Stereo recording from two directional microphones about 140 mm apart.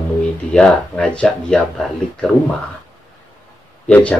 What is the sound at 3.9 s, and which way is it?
Speech, 10° left (ahead or behind).